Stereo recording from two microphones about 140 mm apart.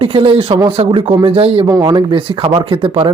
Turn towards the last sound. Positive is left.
turn(degrees=-40)  # may be behind; listen again after turning